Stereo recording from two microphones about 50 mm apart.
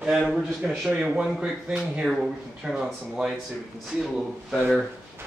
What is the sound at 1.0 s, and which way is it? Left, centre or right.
Speech, centre.